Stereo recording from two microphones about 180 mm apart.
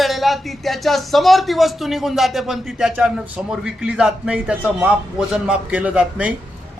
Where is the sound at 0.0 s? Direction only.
Centre (ahead or behind).